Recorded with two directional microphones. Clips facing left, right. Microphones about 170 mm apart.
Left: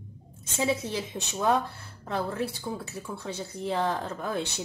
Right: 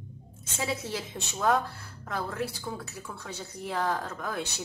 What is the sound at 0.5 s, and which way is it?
A woman's voice, 20° left (ahead or behind).